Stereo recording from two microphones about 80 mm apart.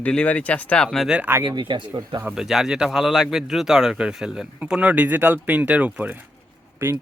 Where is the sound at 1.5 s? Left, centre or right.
Right.